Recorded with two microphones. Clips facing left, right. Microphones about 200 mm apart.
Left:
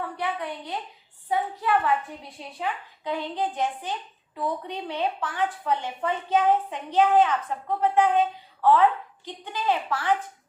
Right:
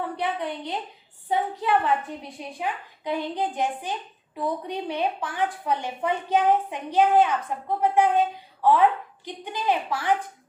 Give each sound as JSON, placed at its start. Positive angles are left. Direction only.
{"t": 0.2, "sound": "a woman's voice", "side_deg": -20}